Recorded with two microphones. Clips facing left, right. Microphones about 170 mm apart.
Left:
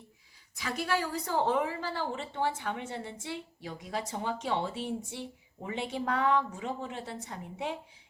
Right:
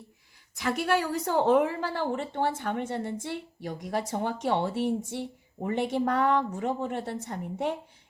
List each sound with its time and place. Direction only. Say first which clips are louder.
0.6 s a woman's voice: right 5 dB; 55° right (ahead or behind)